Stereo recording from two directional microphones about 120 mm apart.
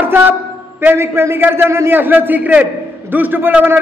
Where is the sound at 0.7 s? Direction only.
20° right (ahead or behind).